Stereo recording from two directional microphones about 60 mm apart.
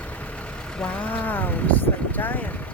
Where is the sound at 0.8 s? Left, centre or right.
Left.